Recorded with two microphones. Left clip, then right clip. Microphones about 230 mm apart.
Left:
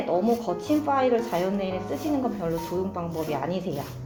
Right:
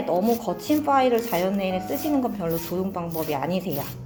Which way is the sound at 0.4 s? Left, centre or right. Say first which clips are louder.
Right 2 dB; right.